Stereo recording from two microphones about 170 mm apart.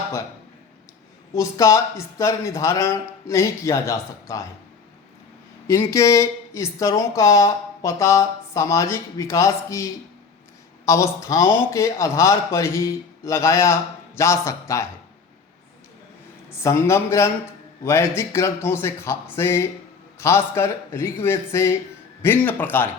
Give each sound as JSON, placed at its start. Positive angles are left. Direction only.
{"t": 1.3, "sound": "speech", "side_deg": 15}
{"t": 5.9, "sound": "speech", "side_deg": 20}
{"t": 16.6, "sound": "speech", "side_deg": 15}